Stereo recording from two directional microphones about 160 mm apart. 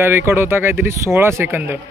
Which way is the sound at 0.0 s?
15° right (ahead or behind).